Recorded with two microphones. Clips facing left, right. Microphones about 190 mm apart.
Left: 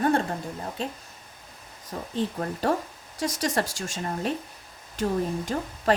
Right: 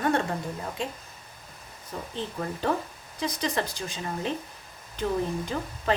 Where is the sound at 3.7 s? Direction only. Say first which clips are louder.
Left 2 dB; 90° left.